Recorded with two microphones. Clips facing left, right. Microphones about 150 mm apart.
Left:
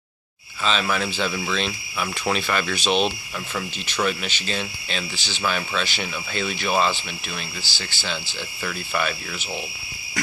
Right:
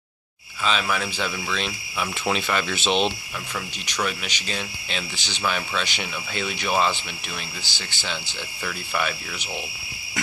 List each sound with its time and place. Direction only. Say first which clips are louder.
0.7 s speech: left 1 dB; 10° right (ahead or behind)
3.8 s speech: left 3 dB; 10° right (ahead or behind)
8.6 s speech: left 1 dB; 5° right (ahead or behind)